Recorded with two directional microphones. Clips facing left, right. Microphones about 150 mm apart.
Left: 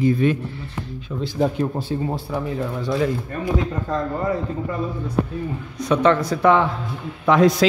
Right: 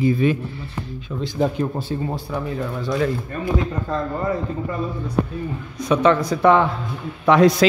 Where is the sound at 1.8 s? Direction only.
25° left (ahead or behind).